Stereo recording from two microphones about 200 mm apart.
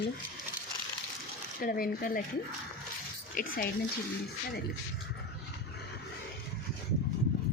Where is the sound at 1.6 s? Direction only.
45° left (ahead or behind).